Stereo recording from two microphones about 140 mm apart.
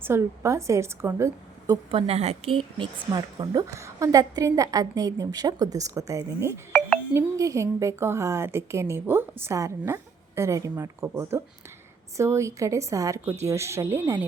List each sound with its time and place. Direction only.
0.0 s a woman's voice: 20° right (ahead or behind)
1.9 s a woman's voice: 45° right (ahead or behind); by 14.3 s 15° right (ahead or behind)